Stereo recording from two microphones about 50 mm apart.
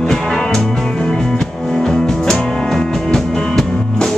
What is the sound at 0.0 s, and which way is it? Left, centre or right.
Music, centre.